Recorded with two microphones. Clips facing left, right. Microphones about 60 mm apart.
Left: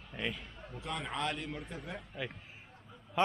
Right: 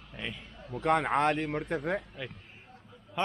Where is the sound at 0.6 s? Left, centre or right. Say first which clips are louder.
Right 13 dB; right.